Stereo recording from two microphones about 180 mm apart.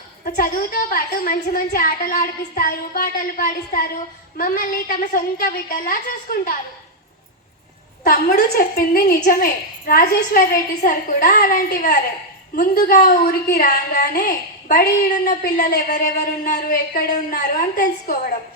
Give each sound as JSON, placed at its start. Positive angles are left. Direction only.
{"t": 0.3, "sound": "a woman's voice", "side_deg": 50}
{"t": 8.0, "sound": "a woman's voice", "side_deg": 55}